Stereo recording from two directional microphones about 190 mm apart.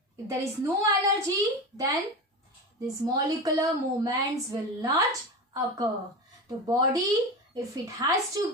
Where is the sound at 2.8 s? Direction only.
20° right (ahead or behind).